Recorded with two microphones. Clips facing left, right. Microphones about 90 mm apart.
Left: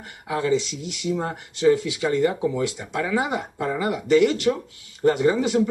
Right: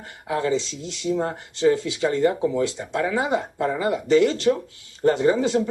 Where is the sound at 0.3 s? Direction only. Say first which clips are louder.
Left 1 dB; 25° right (ahead or behind).